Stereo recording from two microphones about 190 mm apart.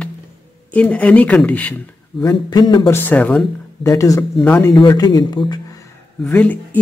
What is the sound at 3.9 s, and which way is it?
Speech, 15° left (ahead or behind).